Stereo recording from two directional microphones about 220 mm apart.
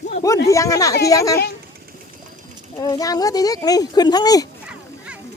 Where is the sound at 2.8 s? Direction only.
15° left (ahead or behind).